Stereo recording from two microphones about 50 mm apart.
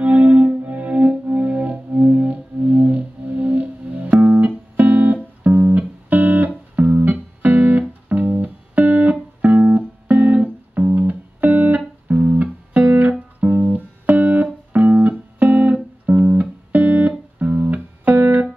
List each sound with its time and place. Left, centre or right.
0.0 s music: right
12.1 s music: right